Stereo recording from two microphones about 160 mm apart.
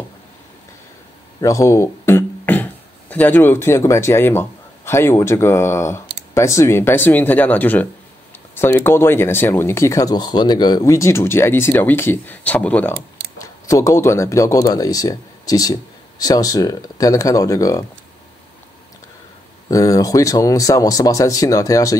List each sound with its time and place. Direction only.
1.4 s speech: 20° left (ahead or behind)
19.7 s speech: 20° left (ahead or behind)